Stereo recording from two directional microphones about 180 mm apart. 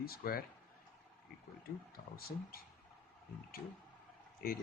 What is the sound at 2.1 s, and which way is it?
Speech, 55° left (ahead or behind).